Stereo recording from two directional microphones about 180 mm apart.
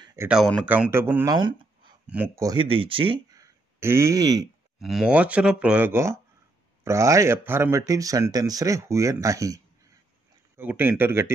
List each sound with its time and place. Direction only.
0.0 s a sound: 15° right (ahead or behind)
0.3 s speech: 5° right (ahead or behind); by 4.5 s 20° right (ahead or behind)
4.7 s speech: centre (ahead or behind)